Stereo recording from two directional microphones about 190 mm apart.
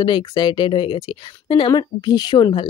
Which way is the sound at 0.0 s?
25° left (ahead or behind).